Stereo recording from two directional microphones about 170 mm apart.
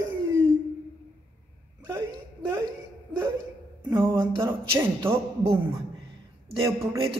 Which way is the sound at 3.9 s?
15° right (ahead or behind).